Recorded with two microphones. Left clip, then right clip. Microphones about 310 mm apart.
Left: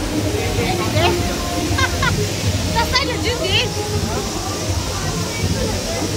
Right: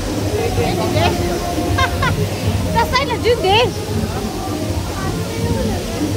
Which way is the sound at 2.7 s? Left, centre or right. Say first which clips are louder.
Right 2 dB; centre.